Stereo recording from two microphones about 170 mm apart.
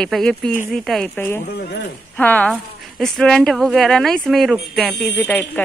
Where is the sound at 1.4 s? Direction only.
75° left (ahead or behind).